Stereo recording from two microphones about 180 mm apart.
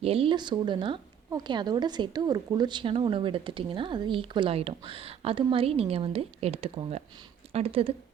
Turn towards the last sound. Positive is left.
turn(degrees=-30)  # may be behind; listen again after turning